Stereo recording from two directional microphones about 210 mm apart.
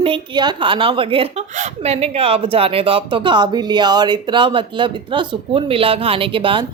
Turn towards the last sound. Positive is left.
turn(degrees=-25)  # may be behind; listen again after turning